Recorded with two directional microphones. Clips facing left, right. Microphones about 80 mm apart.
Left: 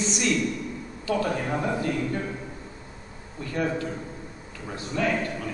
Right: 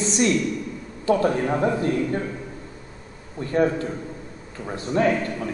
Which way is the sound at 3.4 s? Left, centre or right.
Right.